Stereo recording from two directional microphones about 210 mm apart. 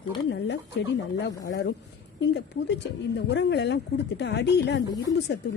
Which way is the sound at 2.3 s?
55° left (ahead or behind).